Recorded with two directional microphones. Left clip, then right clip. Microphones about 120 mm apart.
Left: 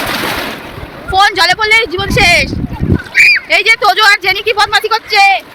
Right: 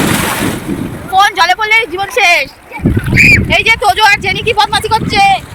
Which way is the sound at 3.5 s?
20° left (ahead or behind).